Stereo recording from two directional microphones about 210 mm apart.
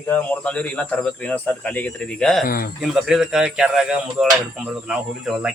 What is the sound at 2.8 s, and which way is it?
Speech, centre (ahead or behind).